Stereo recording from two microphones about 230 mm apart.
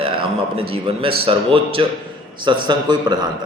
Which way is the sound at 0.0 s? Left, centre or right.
Right.